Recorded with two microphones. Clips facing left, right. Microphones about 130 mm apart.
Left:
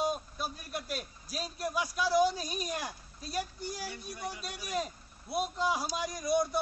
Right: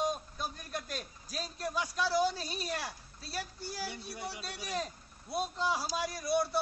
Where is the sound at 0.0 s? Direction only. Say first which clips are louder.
Left 1 dB; 10° left (ahead or behind).